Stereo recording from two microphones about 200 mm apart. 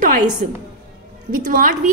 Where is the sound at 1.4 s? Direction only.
45° right (ahead or behind).